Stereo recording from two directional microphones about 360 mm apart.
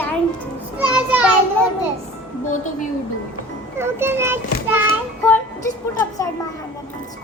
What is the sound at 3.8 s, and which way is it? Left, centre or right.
A child's voice, centre.